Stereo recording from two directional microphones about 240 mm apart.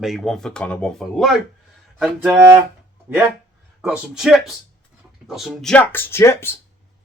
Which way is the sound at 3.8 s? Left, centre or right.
Centre.